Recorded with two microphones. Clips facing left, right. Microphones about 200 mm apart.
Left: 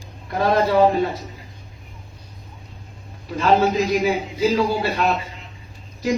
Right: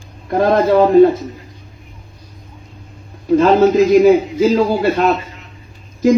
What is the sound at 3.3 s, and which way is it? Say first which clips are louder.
A man's voice: right 8 dB; 45° right (ahead or behind).